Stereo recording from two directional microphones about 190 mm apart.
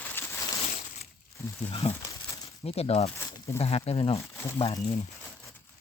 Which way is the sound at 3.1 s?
15° left (ahead or behind).